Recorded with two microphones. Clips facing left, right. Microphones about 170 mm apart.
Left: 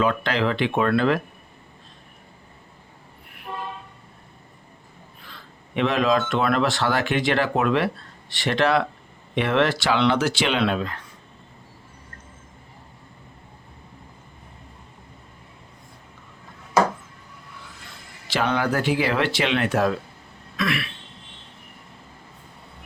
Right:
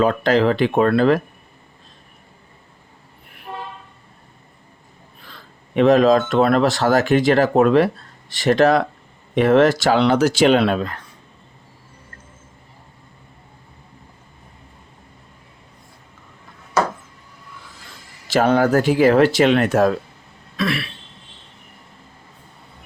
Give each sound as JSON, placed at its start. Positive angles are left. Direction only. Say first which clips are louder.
{"t": 0.0, "sound": "speech", "louder": "right 6 dB", "side_deg": -40}
{"t": 5.7, "sound": "speech", "louder": "right 8 dB", "side_deg": -40}
{"t": 18.3, "sound": "speech", "louder": "right 7 dB", "side_deg": -45}
{"t": 20.6, "sound": "speech", "louder": "right 3 dB", "side_deg": -30}